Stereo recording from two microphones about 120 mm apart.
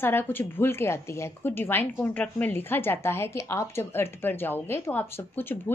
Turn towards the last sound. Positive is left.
turn(degrees=15)  # may be behind; listen again after turning